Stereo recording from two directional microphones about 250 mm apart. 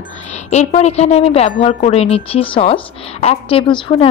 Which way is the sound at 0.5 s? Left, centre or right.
Left.